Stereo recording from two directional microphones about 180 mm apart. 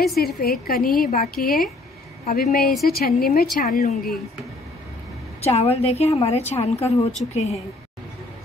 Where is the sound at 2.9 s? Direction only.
55° left (ahead or behind).